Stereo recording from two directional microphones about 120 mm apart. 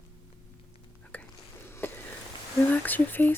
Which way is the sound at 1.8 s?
20° left (ahead or behind).